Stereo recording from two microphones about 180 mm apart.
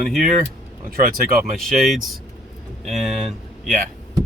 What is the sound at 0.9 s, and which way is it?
Speech, 55° right (ahead or behind).